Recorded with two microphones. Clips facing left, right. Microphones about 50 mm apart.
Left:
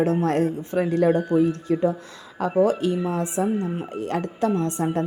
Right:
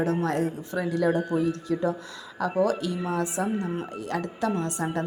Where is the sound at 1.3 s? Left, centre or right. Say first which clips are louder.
Left 5 dB; left.